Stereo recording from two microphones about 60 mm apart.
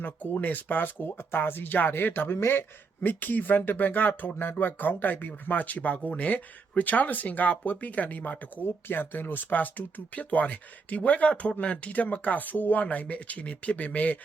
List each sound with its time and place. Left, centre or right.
0.0 s speech: left